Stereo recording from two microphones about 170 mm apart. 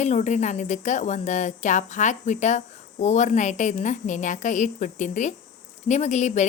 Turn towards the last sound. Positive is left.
turn(degrees=45)  # may be behind; listen again after turning